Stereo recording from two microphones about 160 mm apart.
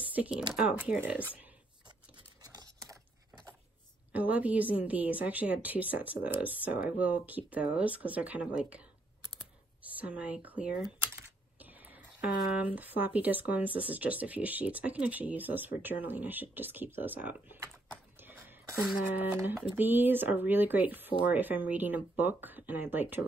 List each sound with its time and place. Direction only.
0.1 s speech: 5° right (ahead or behind)
2.4 s a sound: 25° right (ahead or behind)
4.1 s speech: 10° right (ahead or behind)
9.2 s computer keyboard: 25° right (ahead or behind)
9.9 s speech: 10° right (ahead or behind)
11.6 s whispering: 10° right (ahead or behind)
12.5 s speech: 10° right (ahead or behind)
18.2 s a sound: 10° right (ahead or behind)
19.1 s speech: 10° right (ahead or behind)